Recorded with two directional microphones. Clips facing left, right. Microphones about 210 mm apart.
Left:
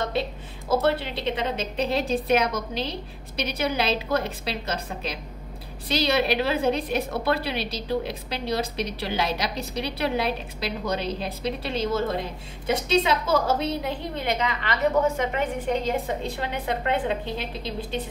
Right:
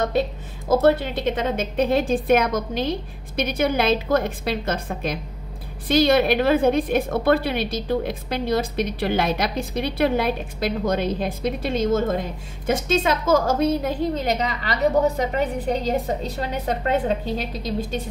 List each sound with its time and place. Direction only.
0.0 s a woman's voice: 45° right (ahead or behind)